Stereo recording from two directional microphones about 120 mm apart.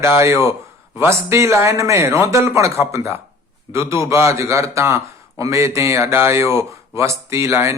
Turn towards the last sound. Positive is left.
turn(degrees=-25)  # may be behind; listen again after turning